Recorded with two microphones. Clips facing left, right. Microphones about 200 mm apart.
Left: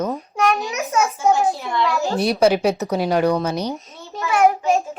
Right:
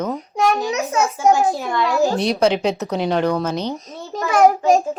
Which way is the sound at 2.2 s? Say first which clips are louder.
Left 1 dB; 5° left (ahead or behind).